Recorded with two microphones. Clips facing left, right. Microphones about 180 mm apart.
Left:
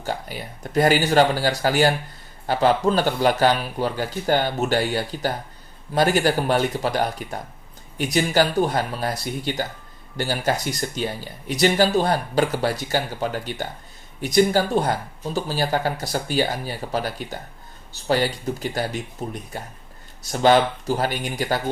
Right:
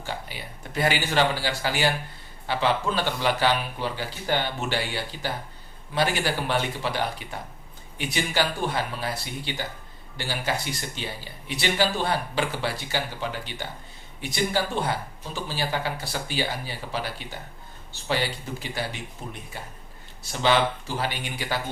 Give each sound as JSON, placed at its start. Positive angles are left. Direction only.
{"t": 0.0, "sound": "speech", "side_deg": 45}